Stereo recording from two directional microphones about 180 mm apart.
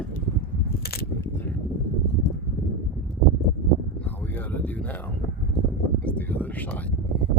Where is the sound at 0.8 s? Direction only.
60° left (ahead or behind).